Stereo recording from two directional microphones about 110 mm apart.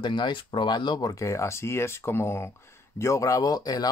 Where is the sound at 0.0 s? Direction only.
45° left (ahead or behind).